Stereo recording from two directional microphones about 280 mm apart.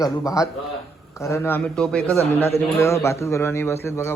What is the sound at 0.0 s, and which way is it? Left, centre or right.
A man's voice, centre.